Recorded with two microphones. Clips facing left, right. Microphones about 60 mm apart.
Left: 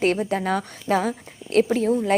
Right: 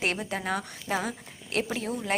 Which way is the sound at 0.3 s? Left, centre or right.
Left.